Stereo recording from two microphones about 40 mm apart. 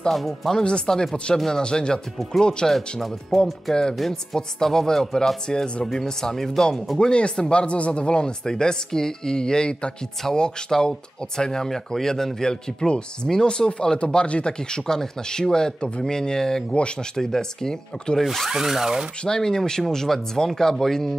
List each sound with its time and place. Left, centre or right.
0.1 s a man's voice: centre
0.6 s speech: centre
2.7 s a man's voice: centre
4.1 s speech: centre
7.0 s speech: left
18.2 s a man's voice: centre
18.5 s speech: centre
19.2 s speech: centre